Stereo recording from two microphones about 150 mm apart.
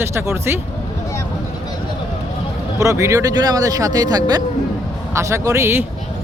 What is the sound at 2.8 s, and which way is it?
Speech, 20° right (ahead or behind).